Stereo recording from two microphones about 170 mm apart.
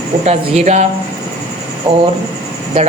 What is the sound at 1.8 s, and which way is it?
Speech, 30° right (ahead or behind).